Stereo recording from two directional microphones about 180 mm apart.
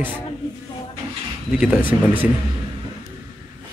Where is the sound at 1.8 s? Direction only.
25° left (ahead or behind).